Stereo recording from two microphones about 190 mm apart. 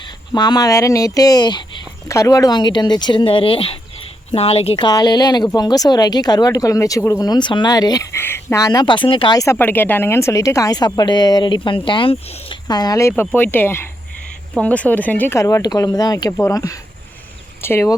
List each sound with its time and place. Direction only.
0.0 s speech: 20° left (ahead or behind)